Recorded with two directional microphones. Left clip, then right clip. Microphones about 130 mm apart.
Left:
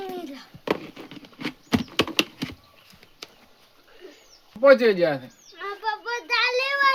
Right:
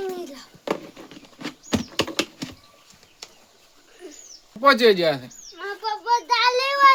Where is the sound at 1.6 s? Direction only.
20° left (ahead or behind).